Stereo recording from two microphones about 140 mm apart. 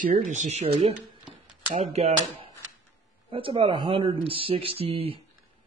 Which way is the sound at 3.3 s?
40° right (ahead or behind).